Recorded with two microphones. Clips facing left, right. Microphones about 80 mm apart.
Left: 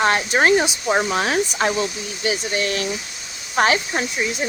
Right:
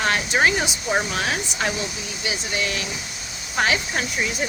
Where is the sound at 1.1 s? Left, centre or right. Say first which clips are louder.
Left 5 dB; left.